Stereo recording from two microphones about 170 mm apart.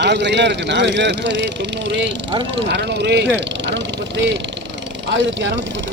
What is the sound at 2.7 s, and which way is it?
Speech, 85° right.